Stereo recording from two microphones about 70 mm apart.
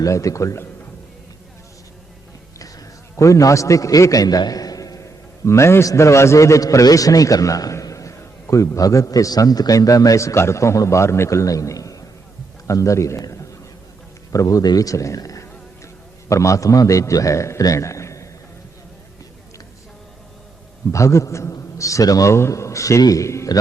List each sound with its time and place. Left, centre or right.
0.0 s a man's voice: left
2.6 s a man's voice: left
17.6 s a sound: left
20.9 s a man's voice: left
22.3 s a man's voice: left